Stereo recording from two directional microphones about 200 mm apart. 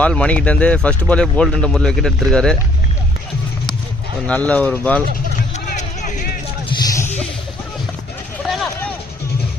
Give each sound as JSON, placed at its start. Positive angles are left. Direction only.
{"t": 0.0, "sound": "speech", "side_deg": 5}
{"t": 4.3, "sound": "speech", "side_deg": 5}
{"t": 5.6, "sound": "music", "side_deg": 40}
{"t": 8.4, "sound": "a sound", "side_deg": 0}